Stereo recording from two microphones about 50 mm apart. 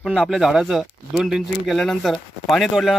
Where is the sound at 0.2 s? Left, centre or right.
Centre.